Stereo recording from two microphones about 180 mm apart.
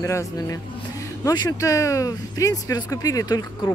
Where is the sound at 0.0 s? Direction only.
15° left (ahead or behind).